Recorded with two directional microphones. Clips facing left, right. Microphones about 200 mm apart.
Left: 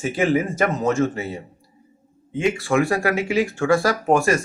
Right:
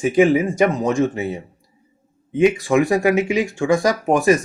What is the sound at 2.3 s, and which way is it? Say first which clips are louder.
Speech: right 5 dB; 20° right (ahead or behind).